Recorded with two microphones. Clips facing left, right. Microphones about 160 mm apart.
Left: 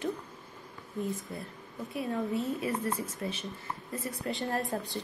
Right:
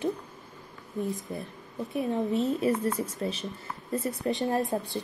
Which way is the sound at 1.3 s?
20° right (ahead or behind).